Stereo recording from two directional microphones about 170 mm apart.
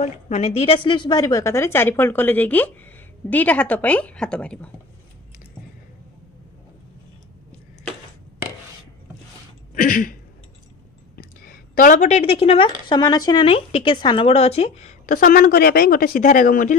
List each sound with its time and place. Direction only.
0.0 s a woman's voice: 40° left (ahead or behind); by 4.6 s 5° left (ahead or behind)
9.8 s a sound: 55° left (ahead or behind)
11.1 s a woman's voice: 60° left (ahead or behind)